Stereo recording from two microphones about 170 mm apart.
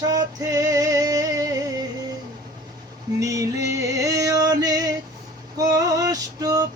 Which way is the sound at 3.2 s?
20° right (ahead or behind).